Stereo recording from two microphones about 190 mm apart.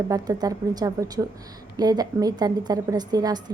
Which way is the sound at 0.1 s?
20° right (ahead or behind).